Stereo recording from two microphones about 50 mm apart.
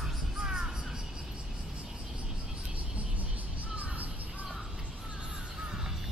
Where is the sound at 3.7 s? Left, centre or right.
Right.